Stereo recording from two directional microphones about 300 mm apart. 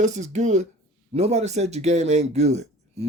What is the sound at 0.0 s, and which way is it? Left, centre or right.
Speech, right.